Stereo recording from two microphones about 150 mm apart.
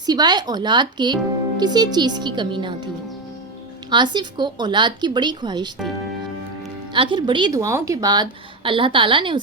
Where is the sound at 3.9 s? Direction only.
30° right (ahead or behind).